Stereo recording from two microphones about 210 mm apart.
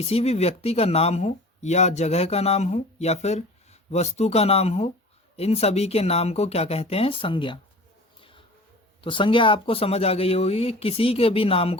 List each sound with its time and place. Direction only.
0.0 s speech: 30° left (ahead or behind)
9.0 s speech: 25° left (ahead or behind)